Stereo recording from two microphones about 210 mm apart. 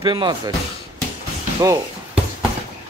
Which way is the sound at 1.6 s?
5° right (ahead or behind).